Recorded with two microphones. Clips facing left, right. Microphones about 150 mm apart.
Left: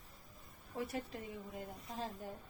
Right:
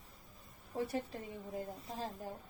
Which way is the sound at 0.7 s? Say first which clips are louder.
Right 3 dB; 30° right (ahead or behind).